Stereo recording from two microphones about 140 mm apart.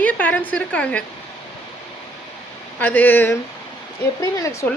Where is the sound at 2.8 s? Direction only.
10° left (ahead or behind).